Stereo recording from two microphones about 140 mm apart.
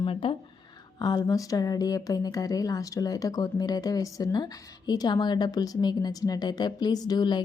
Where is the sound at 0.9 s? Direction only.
30° left (ahead or behind).